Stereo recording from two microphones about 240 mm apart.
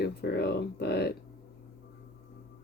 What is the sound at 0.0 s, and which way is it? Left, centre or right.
Speech, left.